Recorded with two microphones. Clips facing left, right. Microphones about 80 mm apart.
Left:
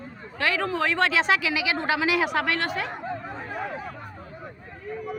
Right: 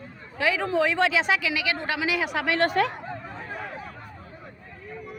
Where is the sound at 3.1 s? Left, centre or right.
Centre.